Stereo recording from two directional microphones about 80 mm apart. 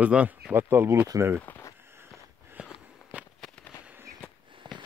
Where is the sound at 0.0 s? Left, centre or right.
Centre.